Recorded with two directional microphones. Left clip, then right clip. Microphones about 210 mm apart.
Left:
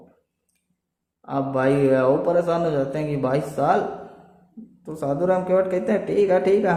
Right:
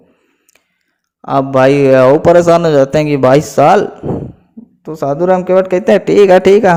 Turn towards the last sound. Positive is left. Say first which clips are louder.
# right 12 dB
turn(degrees=-45)  # may be behind; listen again after turning